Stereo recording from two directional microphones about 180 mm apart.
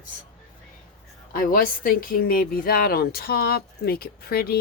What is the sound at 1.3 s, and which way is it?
A woman's voice, 55° left (ahead or behind).